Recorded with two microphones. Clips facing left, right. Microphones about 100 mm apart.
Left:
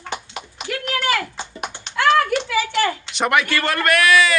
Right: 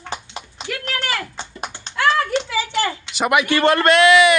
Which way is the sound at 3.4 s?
20° right (ahead or behind).